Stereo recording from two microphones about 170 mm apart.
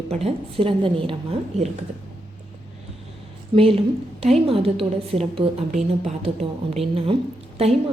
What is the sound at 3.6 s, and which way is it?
A woman's voice, 35° right (ahead or behind).